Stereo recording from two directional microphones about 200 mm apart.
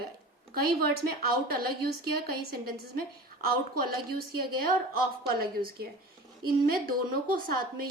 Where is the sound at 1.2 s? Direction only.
50° right (ahead or behind).